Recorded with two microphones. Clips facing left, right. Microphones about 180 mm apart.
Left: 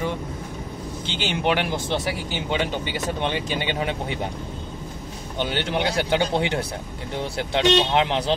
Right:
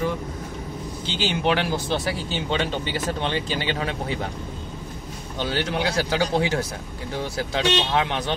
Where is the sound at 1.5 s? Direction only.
20° left (ahead or behind).